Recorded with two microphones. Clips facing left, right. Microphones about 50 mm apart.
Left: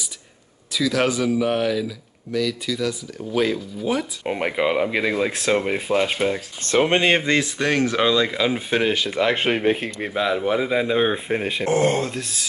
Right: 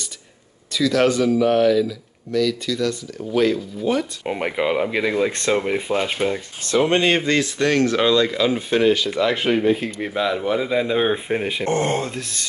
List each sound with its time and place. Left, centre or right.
0.7 s speech: centre
6.8 s speech: centre
9.9 s speech: centre